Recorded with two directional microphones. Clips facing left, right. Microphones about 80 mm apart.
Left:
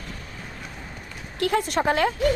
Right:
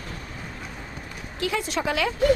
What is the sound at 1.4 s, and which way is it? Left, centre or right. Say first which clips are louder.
Speech: left 4 dB; left.